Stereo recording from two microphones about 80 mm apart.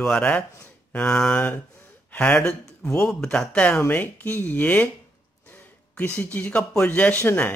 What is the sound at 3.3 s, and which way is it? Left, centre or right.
Mantra, centre.